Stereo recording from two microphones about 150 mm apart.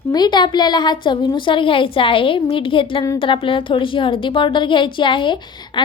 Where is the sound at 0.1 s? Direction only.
30° left (ahead or behind).